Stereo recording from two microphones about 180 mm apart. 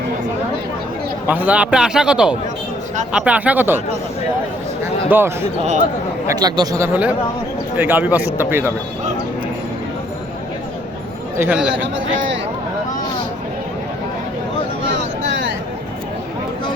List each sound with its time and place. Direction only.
1.3 s a man's voice: 10° right (ahead or behind)
5.0 s speech: 10° right (ahead or behind)
11.3 s speech: 5° right (ahead or behind)